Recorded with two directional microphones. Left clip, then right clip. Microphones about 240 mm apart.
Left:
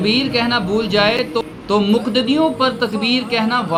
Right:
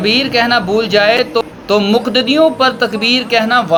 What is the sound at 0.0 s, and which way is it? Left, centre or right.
A man's voice, centre.